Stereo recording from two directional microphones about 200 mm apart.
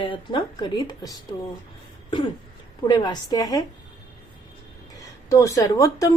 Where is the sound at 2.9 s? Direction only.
20° left (ahead or behind).